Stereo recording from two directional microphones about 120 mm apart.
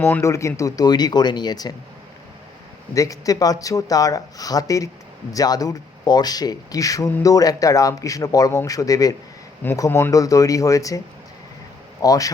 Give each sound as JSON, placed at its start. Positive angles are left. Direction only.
{"t": 0.0, "sound": "speech", "side_deg": 25}
{"t": 2.9, "sound": "speech", "side_deg": 25}
{"t": 12.0, "sound": "speech", "side_deg": 30}